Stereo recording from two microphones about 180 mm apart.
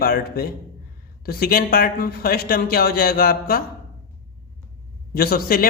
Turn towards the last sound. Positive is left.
turn(degrees=55)  # may be behind; listen again after turning